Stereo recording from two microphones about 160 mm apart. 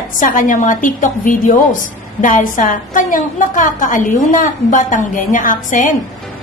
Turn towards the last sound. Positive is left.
turn(degrees=55)  # may be behind; listen again after turning